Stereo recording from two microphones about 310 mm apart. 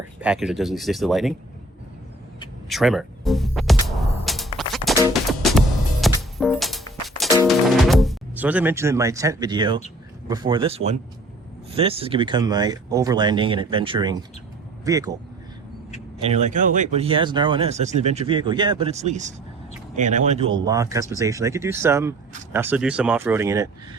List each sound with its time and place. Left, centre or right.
0.2 s speech: centre
2.6 s music: centre
10.2 s speech: centre
16.2 s speech: right